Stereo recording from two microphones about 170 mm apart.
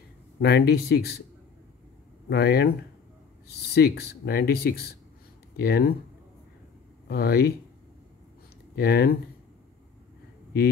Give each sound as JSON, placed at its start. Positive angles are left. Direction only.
{"t": 0.4, "sound": "speech", "side_deg": 75}
{"t": 2.2, "sound": "speech", "side_deg": 70}
{"t": 3.7, "sound": "speech", "side_deg": 75}
{"t": 7.1, "sound": "speech", "side_deg": 70}
{"t": 8.7, "sound": "speech", "side_deg": 70}